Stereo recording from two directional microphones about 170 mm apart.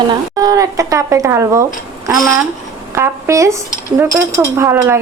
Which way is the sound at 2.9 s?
15° right (ahead or behind).